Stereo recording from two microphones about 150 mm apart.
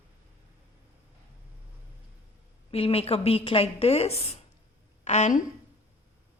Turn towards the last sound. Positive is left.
turn(degrees=55)  # may be behind; listen again after turning